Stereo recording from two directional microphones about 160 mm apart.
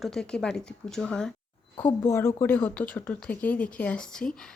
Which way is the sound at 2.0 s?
15° left (ahead or behind).